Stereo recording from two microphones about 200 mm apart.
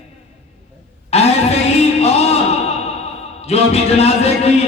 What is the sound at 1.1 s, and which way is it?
Music, 30° left (ahead or behind).